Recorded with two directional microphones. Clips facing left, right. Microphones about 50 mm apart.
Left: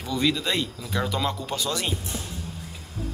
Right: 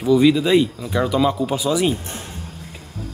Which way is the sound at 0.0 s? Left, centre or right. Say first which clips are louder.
Right 10 dB; centre.